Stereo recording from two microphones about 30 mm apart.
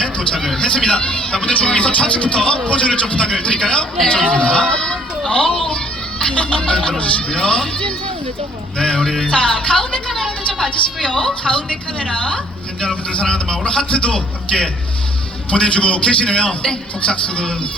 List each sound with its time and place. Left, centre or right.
0.0 s a sound: left
0.3 s speech: centre
0.6 s a man's voice: left
1.8 s music: left
2.6 s a man's voice: left
6.7 s a man's voice: left
10.7 s a man's voice: left